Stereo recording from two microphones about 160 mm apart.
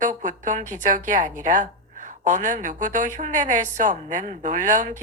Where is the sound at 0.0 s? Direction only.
50° right (ahead or behind).